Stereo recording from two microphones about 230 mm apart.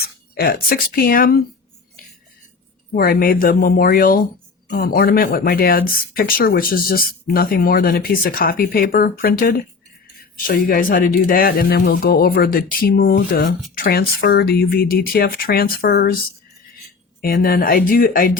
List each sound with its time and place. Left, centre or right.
0.0 s speech: left
2.0 s cutlery: left
2.9 s speech: left
17.2 s speech: left